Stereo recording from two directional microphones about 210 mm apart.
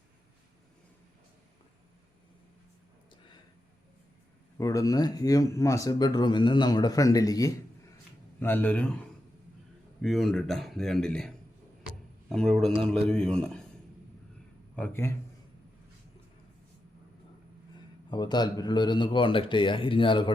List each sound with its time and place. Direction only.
4.5 s a man's voice: 15° left (ahead or behind)
14.8 s speech: 10° left (ahead or behind)
18.1 s a man's voice: 20° left (ahead or behind)